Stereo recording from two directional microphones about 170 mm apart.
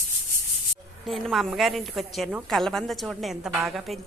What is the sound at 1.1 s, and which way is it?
A woman's voice, centre (ahead or behind).